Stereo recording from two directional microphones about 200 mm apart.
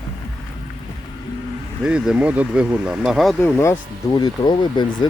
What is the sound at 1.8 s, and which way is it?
Speech, 5° right (ahead or behind).